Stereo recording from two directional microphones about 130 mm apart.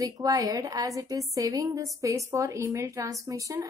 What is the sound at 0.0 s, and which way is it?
A woman's voice, 25° right (ahead or behind).